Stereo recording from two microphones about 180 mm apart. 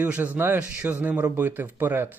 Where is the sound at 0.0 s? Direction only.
10° right (ahead or behind).